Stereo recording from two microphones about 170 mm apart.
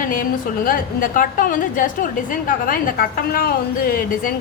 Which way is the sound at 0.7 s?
55° left (ahead or behind).